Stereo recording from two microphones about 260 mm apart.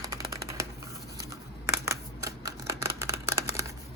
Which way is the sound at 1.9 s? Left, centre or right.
Centre.